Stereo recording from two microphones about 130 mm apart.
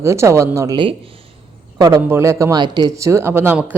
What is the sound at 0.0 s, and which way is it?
Speech, 20° right (ahead or behind).